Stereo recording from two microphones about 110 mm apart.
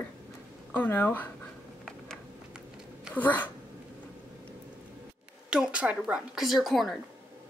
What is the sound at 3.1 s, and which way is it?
Speech, 15° left (ahead or behind).